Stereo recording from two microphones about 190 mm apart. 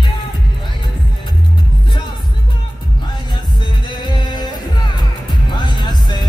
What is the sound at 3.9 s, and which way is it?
Music, 25° left (ahead or behind).